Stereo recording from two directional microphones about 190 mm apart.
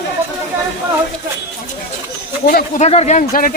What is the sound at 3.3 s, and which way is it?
Speech, 45° left (ahead or behind).